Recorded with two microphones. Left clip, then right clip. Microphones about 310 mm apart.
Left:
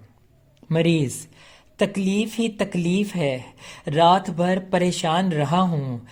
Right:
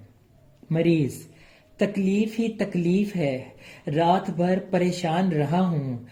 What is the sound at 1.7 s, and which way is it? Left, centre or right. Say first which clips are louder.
Speech: left 2 dB; left.